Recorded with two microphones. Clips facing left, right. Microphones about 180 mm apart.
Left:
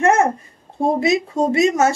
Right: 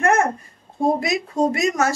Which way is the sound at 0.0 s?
25° left (ahead or behind).